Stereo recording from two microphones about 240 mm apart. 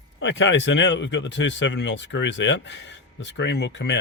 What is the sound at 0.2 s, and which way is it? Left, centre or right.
Speech, left.